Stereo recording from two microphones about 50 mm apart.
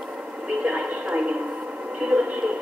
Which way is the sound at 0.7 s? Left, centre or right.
Right.